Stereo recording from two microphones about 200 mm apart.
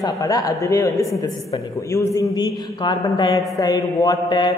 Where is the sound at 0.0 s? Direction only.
15° left (ahead or behind).